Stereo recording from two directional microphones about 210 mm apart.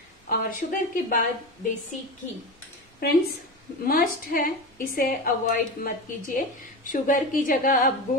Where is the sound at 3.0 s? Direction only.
45° left (ahead or behind).